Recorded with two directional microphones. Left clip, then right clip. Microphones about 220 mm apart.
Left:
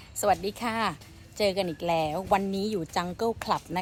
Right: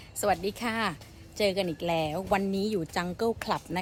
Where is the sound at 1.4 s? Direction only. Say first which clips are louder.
Left 1 dB; 5° right (ahead or behind).